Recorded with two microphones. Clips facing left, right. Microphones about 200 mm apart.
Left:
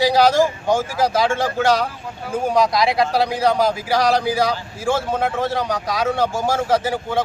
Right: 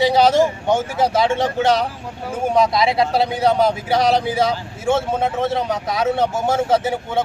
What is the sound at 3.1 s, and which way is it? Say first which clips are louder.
Speech: right 2 dB; 25° right (ahead or behind).